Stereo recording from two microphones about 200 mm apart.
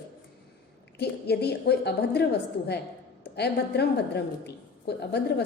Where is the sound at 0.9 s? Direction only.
55° left (ahead or behind).